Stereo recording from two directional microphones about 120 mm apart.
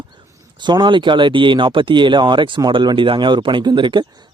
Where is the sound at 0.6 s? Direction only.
40° right (ahead or behind).